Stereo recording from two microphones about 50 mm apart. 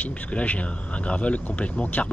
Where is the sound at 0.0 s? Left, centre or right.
Left.